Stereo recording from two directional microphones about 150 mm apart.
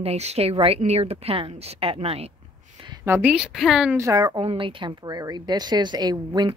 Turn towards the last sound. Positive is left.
turn(degrees=-30)  # may be behind; listen again after turning